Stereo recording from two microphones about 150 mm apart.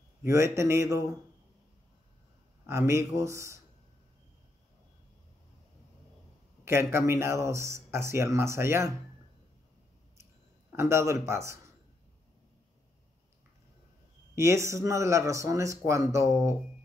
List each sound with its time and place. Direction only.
0.2 s speech: 20° right (ahead or behind)
2.6 s speech: 20° right (ahead or behind)
6.6 s speech: 15° right (ahead or behind)
10.7 s a man's voice: 15° right (ahead or behind)
14.3 s speech: 20° right (ahead or behind)